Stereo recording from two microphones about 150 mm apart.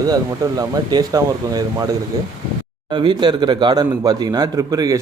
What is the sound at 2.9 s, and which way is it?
A man's voice, 30° right (ahead or behind).